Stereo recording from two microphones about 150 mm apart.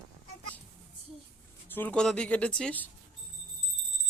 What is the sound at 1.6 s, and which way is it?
Speech, 10° left (ahead or behind).